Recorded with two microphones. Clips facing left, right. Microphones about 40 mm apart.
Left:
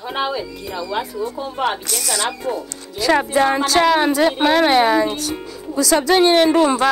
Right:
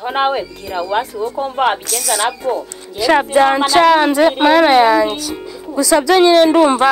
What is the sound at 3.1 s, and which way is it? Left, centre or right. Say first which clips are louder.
Speech: right 5 dB; right.